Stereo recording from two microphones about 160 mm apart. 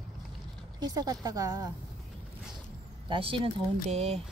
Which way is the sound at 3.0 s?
30° right (ahead or behind).